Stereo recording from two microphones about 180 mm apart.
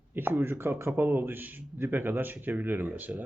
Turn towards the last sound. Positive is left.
turn(degrees=-10)  # may be behind; listen again after turning